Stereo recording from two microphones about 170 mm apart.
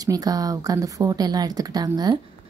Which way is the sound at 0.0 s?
20° right (ahead or behind).